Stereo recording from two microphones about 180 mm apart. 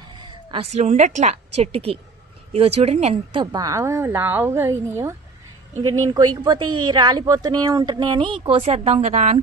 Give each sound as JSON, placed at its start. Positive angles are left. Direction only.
{"t": 0.2, "sound": "a woman's voice", "side_deg": -30}
{"t": 3.5, "sound": "a woman's voice", "side_deg": -20}